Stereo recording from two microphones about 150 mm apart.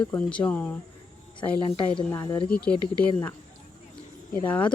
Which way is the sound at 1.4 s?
35° left (ahead or behind).